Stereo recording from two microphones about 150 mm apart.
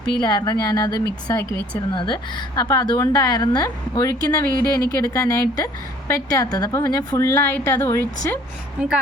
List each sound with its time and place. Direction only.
0.2 s a woman's voice: 25° left (ahead or behind)
7.3 s speech: 10° left (ahead or behind)
8.8 s a woman's voice: 5° right (ahead or behind)